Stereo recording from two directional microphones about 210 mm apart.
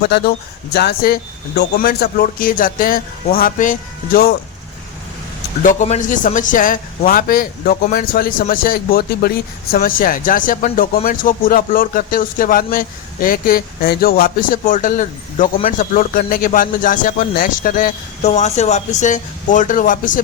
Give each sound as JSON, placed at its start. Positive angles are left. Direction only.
{"t": 0.0, "sound": "speech", "side_deg": 50}
{"t": 5.6, "sound": "speech", "side_deg": 35}